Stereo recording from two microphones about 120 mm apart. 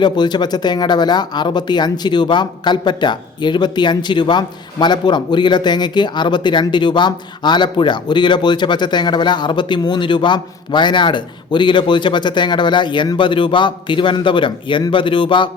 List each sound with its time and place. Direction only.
0.0 s speech: 40° left (ahead or behind)